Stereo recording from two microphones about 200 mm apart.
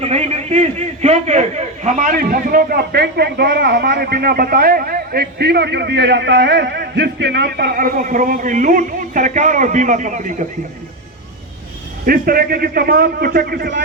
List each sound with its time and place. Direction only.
0.0 s a man's voice: 35° right (ahead or behind)
12.0 s a man's voice: 45° right (ahead or behind)